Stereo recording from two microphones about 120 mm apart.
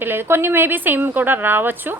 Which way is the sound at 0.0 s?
20° right (ahead or behind).